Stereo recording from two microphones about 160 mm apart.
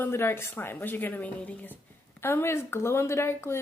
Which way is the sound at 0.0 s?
15° left (ahead or behind).